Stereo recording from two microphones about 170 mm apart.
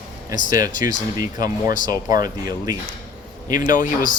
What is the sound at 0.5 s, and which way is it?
Speech, 20° right (ahead or behind).